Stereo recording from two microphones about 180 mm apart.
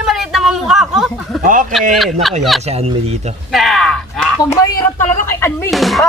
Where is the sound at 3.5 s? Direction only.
Centre (ahead or behind).